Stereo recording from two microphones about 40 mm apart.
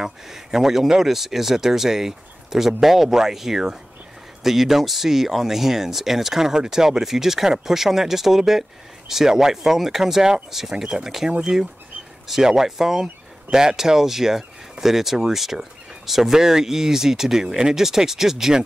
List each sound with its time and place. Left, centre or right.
0.0 s speech: centre